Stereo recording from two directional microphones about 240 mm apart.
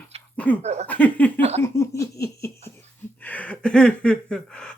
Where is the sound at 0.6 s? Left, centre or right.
Right.